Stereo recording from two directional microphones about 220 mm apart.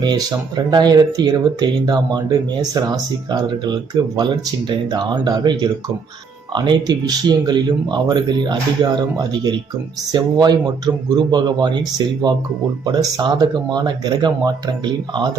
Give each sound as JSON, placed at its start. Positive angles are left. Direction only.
{"t": 0.0, "sound": "speech", "side_deg": -20}